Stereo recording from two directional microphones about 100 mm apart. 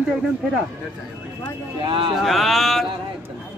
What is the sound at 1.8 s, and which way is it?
Speech, 55° right (ahead or behind).